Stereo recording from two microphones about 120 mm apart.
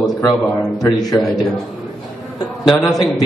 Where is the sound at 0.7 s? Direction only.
30° left (ahead or behind).